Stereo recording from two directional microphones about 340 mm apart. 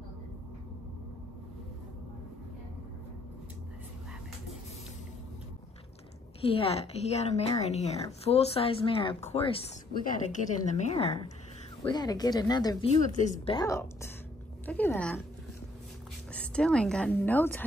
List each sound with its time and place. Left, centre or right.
6.5 s a woman's voice: centre
16.5 s a woman's voice: centre